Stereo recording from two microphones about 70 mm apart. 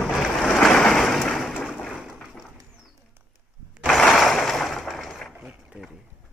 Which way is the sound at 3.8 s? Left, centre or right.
Centre.